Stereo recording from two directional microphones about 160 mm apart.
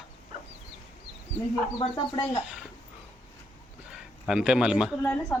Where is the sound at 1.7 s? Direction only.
30° left (ahead or behind).